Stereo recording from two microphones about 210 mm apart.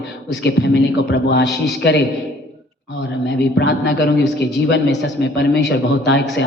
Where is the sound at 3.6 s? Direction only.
55° left (ahead or behind).